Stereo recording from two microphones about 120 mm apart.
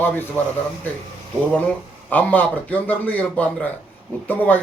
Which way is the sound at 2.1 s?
15° left (ahead or behind).